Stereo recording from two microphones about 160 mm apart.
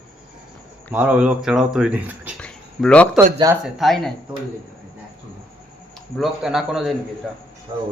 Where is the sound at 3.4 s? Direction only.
20° right (ahead or behind).